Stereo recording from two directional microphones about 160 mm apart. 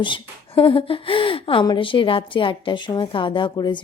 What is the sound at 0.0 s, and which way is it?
A woman's voice, 35° left (ahead or behind).